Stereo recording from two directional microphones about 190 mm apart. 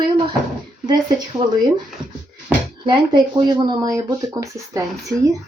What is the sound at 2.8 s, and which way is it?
Speech, 25° right (ahead or behind).